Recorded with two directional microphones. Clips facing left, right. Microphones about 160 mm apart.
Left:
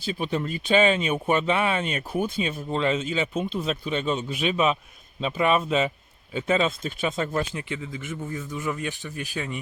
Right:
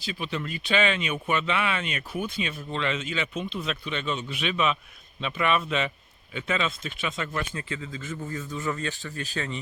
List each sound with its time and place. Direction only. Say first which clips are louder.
0.2 s speech: left 5 dB; 45° left (ahead or behind)
7.5 s speech: left 2 dB; 15° left (ahead or behind)